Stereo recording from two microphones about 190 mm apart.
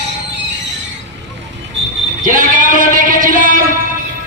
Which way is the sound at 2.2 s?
45° right (ahead or behind).